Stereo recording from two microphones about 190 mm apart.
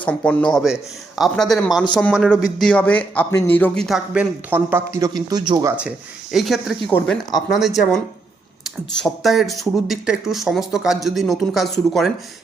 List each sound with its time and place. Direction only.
0.0 s a man's voice: 10° left (ahead or behind); by 5.7 s 20° right (ahead or behind)
6.3 s a man's voice: centre (ahead or behind)